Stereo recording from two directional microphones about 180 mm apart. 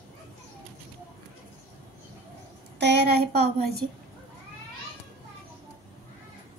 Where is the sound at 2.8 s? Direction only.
70° right (ahead or behind).